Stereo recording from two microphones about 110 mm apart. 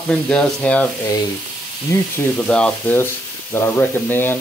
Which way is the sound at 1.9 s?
25° left (ahead or behind).